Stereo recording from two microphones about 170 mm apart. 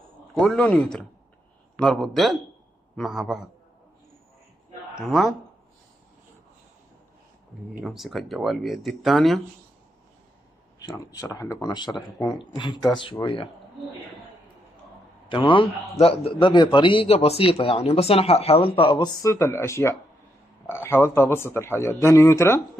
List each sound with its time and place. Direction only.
0.3 s speech: centre (ahead or behind)
7.8 s speech: centre (ahead or behind)
11.3 s speech: 20° left (ahead or behind)
15.2 s a man's voice: 30° left (ahead or behind)
19.2 s speech: 15° left (ahead or behind)